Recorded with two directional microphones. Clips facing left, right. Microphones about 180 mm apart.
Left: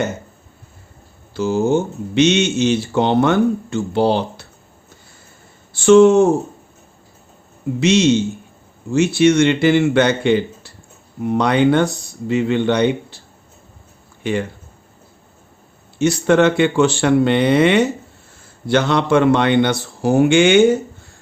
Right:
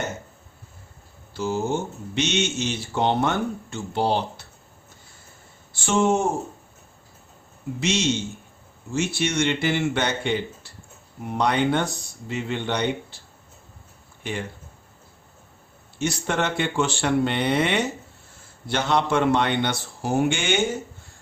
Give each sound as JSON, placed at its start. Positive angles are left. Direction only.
{"t": 1.3, "sound": "speech", "side_deg": 90}
{"t": 5.7, "sound": "speech", "side_deg": 80}
{"t": 7.8, "sound": "a man's voice", "side_deg": 75}
{"t": 16.0, "sound": "a man's voice", "side_deg": 85}